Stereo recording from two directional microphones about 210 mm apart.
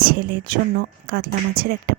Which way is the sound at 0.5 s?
45° right (ahead or behind).